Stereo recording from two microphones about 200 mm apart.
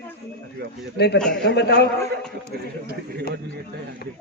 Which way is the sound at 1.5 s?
55° left (ahead or behind).